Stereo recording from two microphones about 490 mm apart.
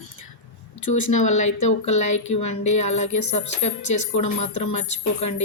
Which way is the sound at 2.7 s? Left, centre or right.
Centre.